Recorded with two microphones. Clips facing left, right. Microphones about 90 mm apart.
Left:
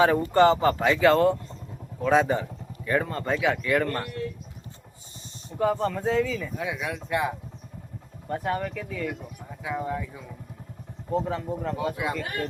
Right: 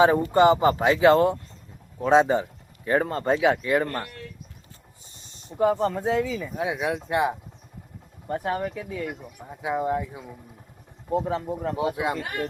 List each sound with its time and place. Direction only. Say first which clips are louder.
0.0 s speech: right 1 dB; 20° right (ahead or behind)
5.5 s speech: right 3 dB; 25° right (ahead or behind)
8.3 s speech: right 1 dB; 15° right (ahead or behind)
11.1 s speech: right 2 dB; 15° right (ahead or behind)